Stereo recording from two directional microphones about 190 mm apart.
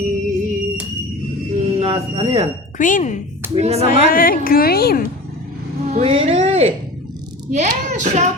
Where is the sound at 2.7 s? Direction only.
45° left (ahead or behind).